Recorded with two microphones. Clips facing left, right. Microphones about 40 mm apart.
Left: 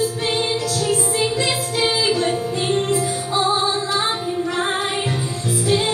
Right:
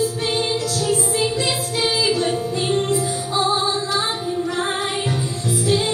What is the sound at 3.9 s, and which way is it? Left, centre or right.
Female singing, left.